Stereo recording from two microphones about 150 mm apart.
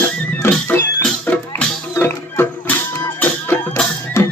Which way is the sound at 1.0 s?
10° left (ahead or behind).